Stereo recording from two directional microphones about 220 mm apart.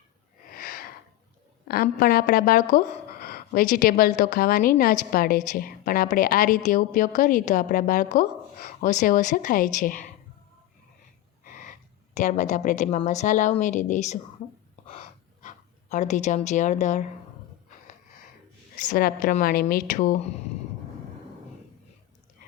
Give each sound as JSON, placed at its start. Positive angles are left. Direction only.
{"t": 0.5, "sound": "a sound", "side_deg": 40}
{"t": 1.6, "sound": "speech", "side_deg": 45}
{"t": 12.1, "sound": "speech", "side_deg": 35}
{"t": 14.8, "sound": "pant", "side_deg": 35}
{"t": 18.8, "sound": "speech", "side_deg": 40}